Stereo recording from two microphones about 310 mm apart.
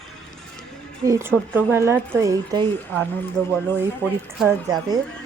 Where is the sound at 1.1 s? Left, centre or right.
Centre.